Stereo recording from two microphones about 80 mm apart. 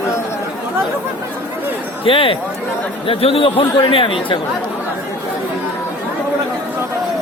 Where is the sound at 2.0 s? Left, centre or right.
Left.